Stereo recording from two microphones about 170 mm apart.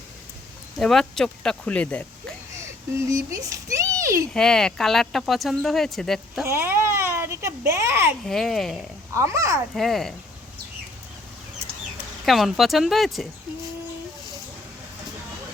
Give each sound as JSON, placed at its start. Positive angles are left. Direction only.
{"t": 0.8, "sound": "speech", "side_deg": 5}
{"t": 3.1, "sound": "a child's voice", "side_deg": -20}
{"t": 4.4, "sound": "speech", "side_deg": 5}
{"t": 6.4, "sound": "a child's voice", "side_deg": -15}
{"t": 8.3, "sound": "speech", "side_deg": 0}
{"t": 9.1, "sound": "speech", "side_deg": -15}
{"t": 9.7, "sound": "speech", "side_deg": 0}
{"t": 12.2, "sound": "speech", "side_deg": 0}